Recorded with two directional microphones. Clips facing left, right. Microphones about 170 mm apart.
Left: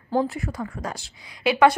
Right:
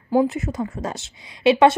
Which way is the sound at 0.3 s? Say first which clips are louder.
Right 5 dB; 20° right (ahead or behind).